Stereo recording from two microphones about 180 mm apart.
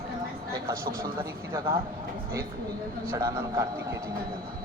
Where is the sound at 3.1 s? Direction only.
20° right (ahead or behind).